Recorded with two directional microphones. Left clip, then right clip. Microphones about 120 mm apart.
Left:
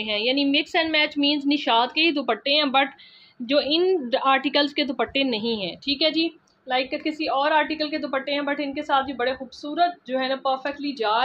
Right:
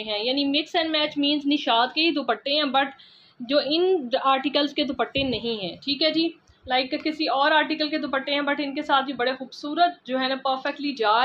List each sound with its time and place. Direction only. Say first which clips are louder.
0.0 s a woman's voice: left 2 dB; 30° left (ahead or behind)
5.9 s a woman's voice: even; 15° left (ahead or behind); by 11.2 s 5° right (ahead or behind)